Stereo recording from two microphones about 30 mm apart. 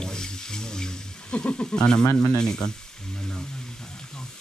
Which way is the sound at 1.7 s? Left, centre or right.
Left.